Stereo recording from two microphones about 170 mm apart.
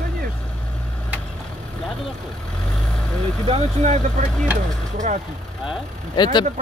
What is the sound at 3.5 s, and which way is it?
Speech, 40° right (ahead or behind).